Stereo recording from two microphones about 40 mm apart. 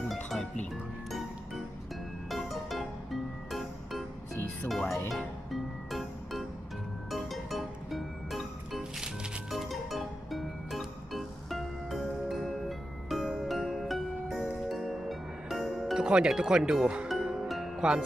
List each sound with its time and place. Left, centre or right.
0.1 s music: centre
2.2 s music: centre
4.6 s speech: centre
5.1 s music: centre
16.0 s music: right
16.3 s speech: centre
17.5 s music: centre
17.7 s speech: centre